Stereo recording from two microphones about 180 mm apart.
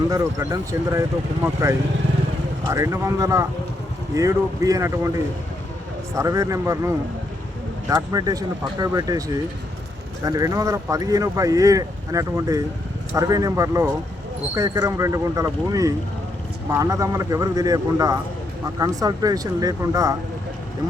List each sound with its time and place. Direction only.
0.1 s a man's voice: 20° right (ahead or behind)
2.6 s a man's voice: 15° right (ahead or behind)